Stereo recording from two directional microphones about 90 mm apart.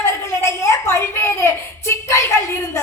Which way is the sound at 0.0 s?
30° left (ahead or behind).